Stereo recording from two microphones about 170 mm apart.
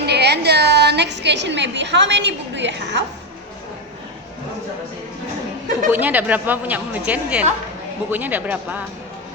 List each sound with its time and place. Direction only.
0.0 s a woman's voice: 75° right (ahead or behind); by 3.0 s 90° right
5.9 s speech: 10° right (ahead or behind)